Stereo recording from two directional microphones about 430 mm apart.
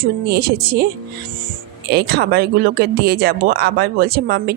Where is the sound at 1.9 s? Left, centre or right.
Right.